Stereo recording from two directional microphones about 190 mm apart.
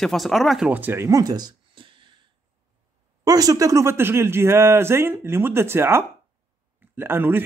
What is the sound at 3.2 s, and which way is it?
Speech, 20° right (ahead or behind).